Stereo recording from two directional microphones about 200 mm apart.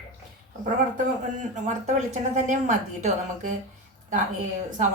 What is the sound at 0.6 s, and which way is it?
A woman's voice, 40° right (ahead or behind).